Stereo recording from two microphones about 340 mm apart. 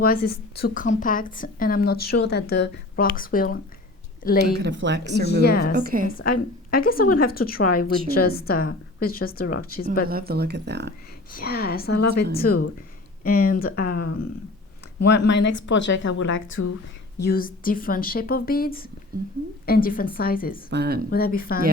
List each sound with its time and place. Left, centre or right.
0.0 s a woman's voice: left
4.5 s speech: right
5.4 s a woman's voice: left
5.7 s speech: right
6.1 s a woman's voice: left
10.1 s speech: right
11.3 s a woman's voice: left
17.2 s a woman's voice: left
20.7 s speech: right
21.1 s a woman's voice: left